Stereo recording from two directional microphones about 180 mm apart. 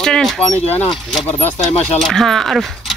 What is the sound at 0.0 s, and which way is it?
Speech, centre (ahead or behind).